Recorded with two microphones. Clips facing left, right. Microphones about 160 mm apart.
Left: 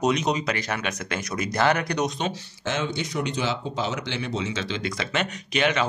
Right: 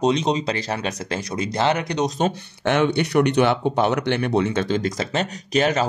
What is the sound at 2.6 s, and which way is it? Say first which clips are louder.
Speech: right 9 dB; 65° right (ahead or behind).